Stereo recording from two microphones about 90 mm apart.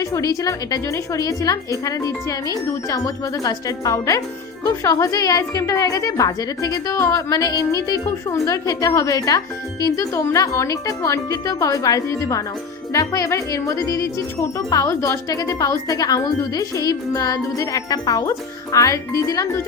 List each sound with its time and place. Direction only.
0.0 s speech: 40° left (ahead or behind)
18.3 s speech: 40° left (ahead or behind)